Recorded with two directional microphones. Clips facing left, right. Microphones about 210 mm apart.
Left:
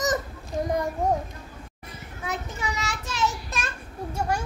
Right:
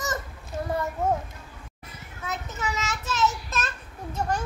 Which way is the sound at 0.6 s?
15° left (ahead or behind).